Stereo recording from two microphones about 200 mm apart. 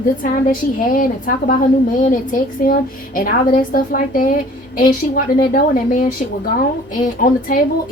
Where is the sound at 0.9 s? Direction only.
40° left (ahead or behind).